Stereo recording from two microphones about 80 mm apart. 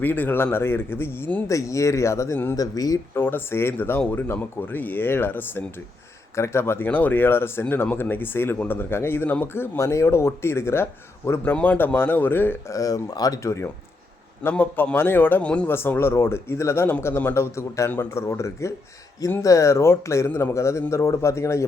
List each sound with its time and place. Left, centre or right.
0.0 s speech: left
1.5 s speech: left
2.6 s speech: left
3.2 s speech: left
11.5 s speech: left
12.6 s speech: left
14.5 s speech: centre
15.6 s speech: left